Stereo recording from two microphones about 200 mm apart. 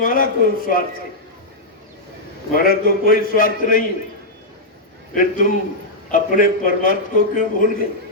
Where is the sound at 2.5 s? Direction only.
45° left (ahead or behind).